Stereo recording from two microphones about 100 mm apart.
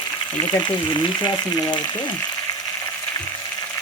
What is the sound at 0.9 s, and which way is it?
Frying, 50° left (ahead or behind).